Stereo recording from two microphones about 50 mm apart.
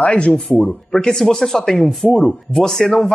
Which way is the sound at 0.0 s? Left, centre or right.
Left.